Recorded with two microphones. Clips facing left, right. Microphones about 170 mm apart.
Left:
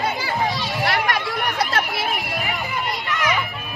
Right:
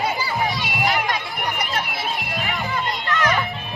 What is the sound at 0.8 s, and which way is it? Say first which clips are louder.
Run: left 1 dB; 70° left (ahead or behind).